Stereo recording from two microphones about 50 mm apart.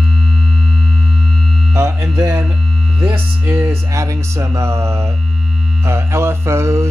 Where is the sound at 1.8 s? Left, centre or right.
Right.